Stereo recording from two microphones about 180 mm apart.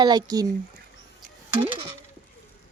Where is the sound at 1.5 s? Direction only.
30° right (ahead or behind).